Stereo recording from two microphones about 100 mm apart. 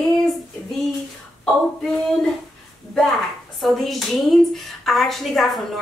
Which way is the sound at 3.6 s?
Centre (ahead or behind).